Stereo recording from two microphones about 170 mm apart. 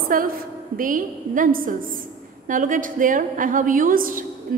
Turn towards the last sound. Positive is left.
turn(degrees=-55)  # may be behind; listen again after turning